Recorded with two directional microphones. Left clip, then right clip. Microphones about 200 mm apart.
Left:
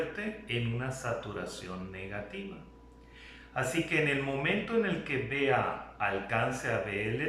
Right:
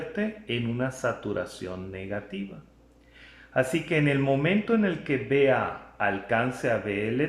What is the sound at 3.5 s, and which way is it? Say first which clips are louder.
Speech: right 5 dB; 40° right (ahead or behind).